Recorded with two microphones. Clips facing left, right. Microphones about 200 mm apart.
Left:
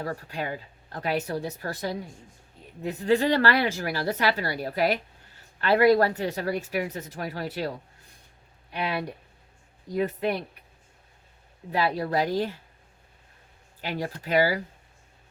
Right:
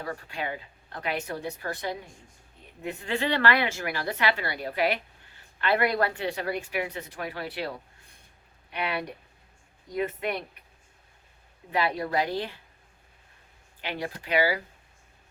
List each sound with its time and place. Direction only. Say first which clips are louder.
0.0 s a woman's voice: left 2 dB; 40° left (ahead or behind)
9.9 s a woman's voice: left 3 dB; 35° left (ahead or behind)
11.7 s a woman's voice: left 2 dB; 35° left (ahead or behind)
13.8 s a woman's voice: left 2 dB; 40° left (ahead or behind)